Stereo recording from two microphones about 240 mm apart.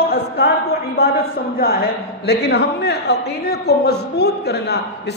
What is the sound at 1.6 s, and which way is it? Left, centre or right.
A man's voice, left.